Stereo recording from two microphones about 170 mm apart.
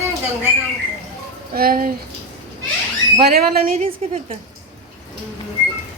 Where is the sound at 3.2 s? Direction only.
65° right (ahead or behind).